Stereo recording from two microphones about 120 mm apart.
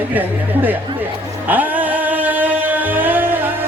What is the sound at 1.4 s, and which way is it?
Music, 15° right (ahead or behind).